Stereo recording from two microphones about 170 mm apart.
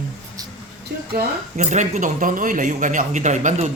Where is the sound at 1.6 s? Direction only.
45° right (ahead or behind).